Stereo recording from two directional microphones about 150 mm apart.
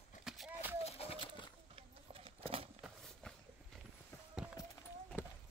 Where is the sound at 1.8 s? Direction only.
40° right (ahead or behind).